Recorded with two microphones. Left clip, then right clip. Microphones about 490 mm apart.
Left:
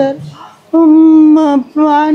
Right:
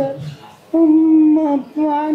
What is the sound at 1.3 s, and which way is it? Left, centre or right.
Speech, left.